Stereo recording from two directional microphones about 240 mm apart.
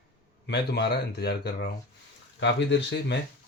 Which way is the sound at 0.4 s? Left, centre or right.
Left.